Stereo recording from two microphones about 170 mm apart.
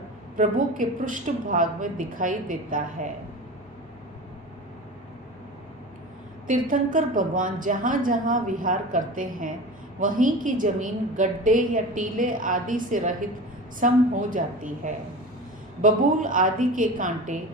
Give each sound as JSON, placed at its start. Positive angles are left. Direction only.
{"t": 0.3, "sound": "a woman's voice", "side_deg": -50}
{"t": 6.5, "sound": "a woman's voice", "side_deg": -50}